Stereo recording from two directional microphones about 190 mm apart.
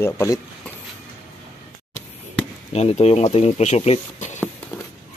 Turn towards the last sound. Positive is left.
turn(degrees=35)  # may be behind; listen again after turning